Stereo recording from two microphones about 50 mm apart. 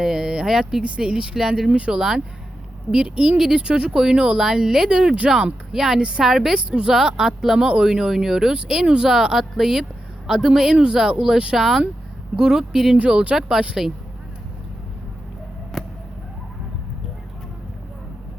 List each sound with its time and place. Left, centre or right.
0.0 s speech: centre
6.7 s speech: centre
11.5 s speech: centre
13.0 s speech: right
13.6 s speech: centre
15.7 s a sound: centre